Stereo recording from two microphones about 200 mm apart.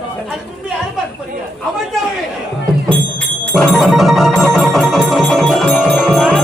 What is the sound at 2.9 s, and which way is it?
Music, 5° left (ahead or behind).